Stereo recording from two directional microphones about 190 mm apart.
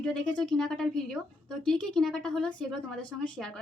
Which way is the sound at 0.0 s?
5° left (ahead or behind).